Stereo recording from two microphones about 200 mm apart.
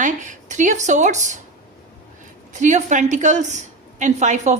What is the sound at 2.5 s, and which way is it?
A woman's voice, 35° right (ahead or behind).